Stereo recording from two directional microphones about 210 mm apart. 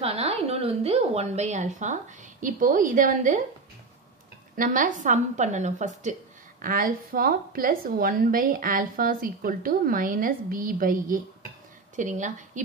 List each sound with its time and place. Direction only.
0.0 s a woman's voice: 30° right (ahead or behind)
4.6 s a woman's voice: 40° right (ahead or behind)